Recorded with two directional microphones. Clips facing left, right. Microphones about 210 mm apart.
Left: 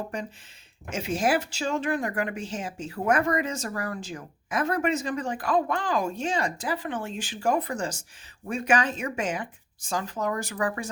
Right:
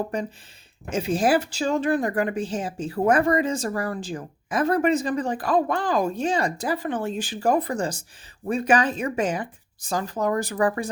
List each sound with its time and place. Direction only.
0.9 s speech: 35° right (ahead or behind)